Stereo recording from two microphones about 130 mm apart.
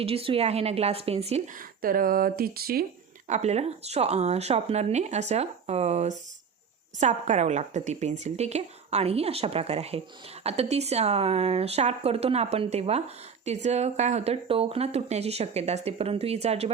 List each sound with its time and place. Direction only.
0.0 s speech: 50° right (ahead or behind)
1.8 s speech: 90° right
3.2 s a woman's voice: 65° right (ahead or behind)